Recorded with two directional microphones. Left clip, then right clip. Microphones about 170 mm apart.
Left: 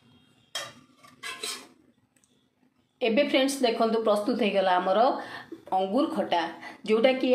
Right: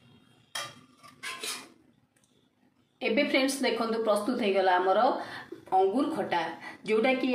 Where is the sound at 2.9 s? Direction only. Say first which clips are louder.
Left 3 dB; 35° left (ahead or behind).